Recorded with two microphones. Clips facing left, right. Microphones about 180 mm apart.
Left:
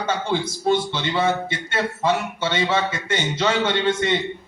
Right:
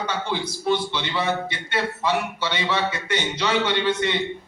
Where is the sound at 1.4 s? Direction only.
50° left (ahead or behind).